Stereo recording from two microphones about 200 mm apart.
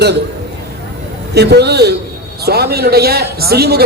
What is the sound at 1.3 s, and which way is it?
A man's voice, 55° right (ahead or behind).